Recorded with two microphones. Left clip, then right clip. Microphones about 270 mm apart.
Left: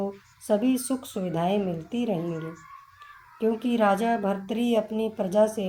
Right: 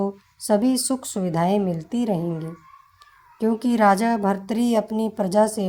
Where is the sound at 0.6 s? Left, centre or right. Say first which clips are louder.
Right 4 dB; right.